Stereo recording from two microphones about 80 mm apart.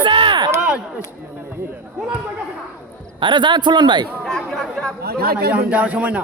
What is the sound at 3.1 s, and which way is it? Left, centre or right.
Speech, right.